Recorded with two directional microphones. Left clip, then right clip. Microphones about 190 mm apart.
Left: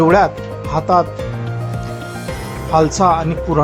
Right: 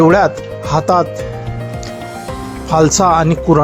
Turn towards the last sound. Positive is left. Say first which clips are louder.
# right 5 dB
turn(degrees=-25)  # may be behind; listen again after turning